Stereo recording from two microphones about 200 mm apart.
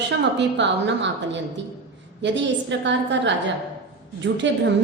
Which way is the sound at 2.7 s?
60° right (ahead or behind).